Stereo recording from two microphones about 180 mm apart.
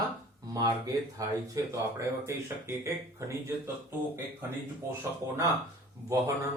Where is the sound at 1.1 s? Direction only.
20° right (ahead or behind).